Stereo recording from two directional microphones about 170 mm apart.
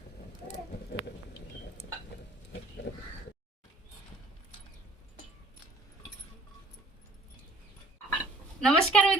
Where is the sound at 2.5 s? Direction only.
90° left.